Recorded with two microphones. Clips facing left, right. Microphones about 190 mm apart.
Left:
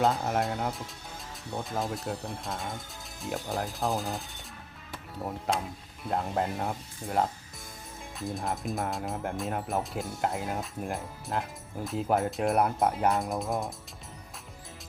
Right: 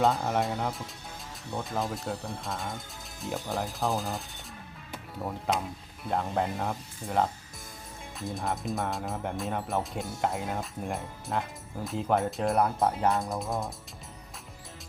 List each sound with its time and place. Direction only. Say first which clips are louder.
0.0 s speech: right 1 dB; centre (ahead or behind)
5.5 s speech: right 1 dB; centre (ahead or behind)